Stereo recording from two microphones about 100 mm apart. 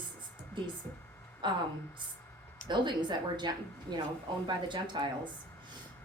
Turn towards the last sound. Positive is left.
turn(degrees=-50)  # may be behind; listen again after turning